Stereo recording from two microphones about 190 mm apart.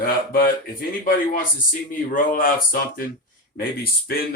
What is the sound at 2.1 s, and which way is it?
Speech, 45° left (ahead or behind).